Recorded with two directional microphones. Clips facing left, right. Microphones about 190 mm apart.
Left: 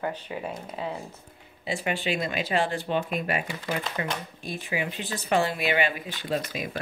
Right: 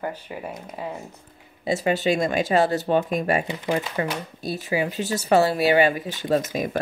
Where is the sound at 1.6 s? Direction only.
40° right (ahead or behind).